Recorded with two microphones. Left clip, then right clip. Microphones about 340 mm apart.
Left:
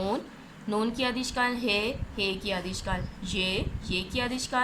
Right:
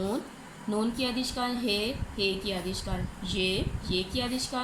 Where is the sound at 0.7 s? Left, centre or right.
Left.